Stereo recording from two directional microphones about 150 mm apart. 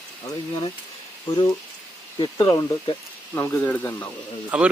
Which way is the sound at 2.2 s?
30° left (ahead or behind).